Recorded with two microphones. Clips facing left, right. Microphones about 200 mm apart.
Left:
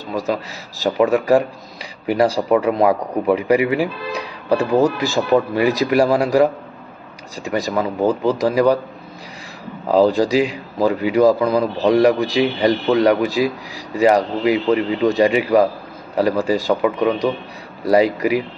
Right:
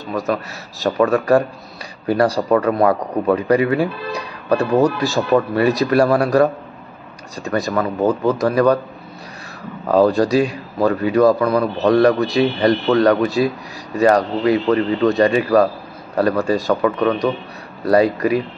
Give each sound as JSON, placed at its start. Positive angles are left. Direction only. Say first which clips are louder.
{"t": 0.8, "sound": "speech", "louder": "even", "side_deg": 15}
{"t": 9.8, "sound": "a man's voice", "louder": "even", "side_deg": 15}